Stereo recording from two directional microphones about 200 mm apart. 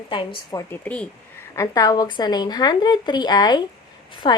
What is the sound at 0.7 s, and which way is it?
Speech, 5° left (ahead or behind).